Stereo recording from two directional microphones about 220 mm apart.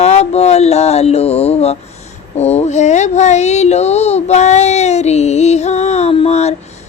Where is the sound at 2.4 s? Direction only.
30° left (ahead or behind).